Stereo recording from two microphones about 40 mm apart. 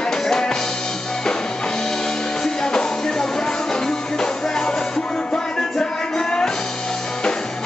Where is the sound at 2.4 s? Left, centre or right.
Centre.